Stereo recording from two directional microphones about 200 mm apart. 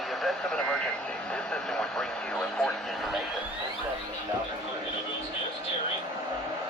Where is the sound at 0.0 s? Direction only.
Centre (ahead or behind).